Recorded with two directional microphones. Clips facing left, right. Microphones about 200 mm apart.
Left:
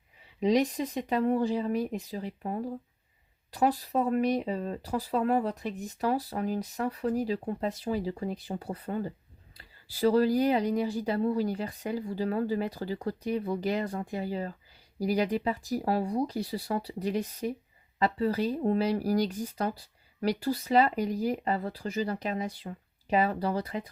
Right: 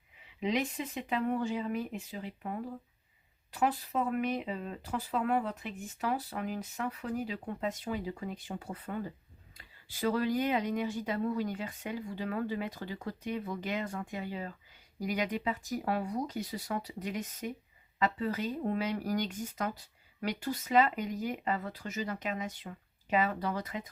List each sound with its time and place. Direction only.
0.3 s speech: 35° left (ahead or behind)